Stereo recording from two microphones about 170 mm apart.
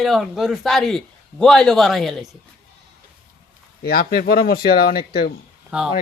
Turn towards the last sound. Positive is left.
turn(degrees=-5)  # may be behind; listen again after turning